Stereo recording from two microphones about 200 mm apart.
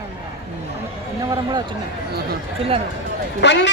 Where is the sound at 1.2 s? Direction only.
20° right (ahead or behind).